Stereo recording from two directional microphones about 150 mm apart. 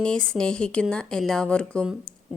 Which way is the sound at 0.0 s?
5° left (ahead or behind).